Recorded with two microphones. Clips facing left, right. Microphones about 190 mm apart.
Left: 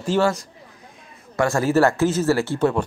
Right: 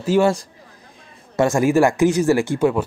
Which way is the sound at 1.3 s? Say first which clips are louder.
Right 3 dB; 20° right (ahead or behind).